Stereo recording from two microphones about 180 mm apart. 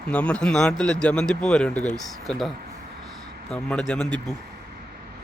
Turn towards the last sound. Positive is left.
turn(degrees=-25)  # may be behind; listen again after turning